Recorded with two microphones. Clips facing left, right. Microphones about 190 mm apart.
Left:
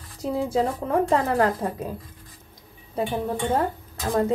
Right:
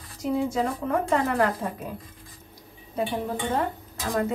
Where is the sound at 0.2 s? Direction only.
35° left (ahead or behind).